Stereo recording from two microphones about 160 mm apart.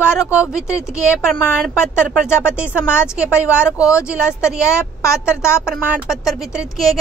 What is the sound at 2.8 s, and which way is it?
Speech, 15° left (ahead or behind).